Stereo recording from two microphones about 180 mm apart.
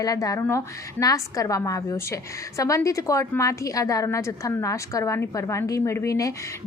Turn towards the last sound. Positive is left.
turn(degrees=15)  # may be behind; listen again after turning